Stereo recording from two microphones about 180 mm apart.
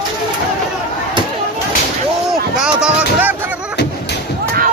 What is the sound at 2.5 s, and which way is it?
Music, 5° right (ahead or behind).